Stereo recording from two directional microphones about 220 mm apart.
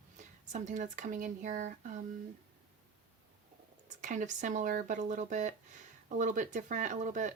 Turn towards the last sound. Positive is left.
turn(degrees=-35)  # may be behind; listen again after turning